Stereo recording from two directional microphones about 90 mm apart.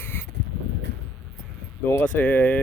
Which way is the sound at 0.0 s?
25° left (ahead or behind).